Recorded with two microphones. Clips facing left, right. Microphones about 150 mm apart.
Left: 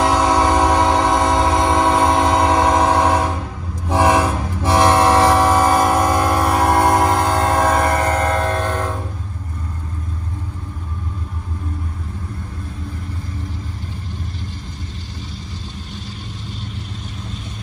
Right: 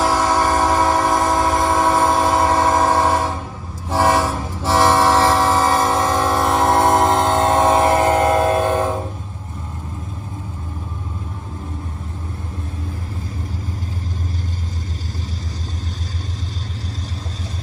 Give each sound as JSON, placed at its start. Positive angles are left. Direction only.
{"t": 0.0, "sound": "train", "side_deg": 20}
{"t": 6.1, "sound": "train", "side_deg": 0}